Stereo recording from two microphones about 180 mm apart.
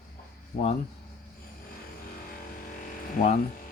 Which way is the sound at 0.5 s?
45° left (ahead or behind).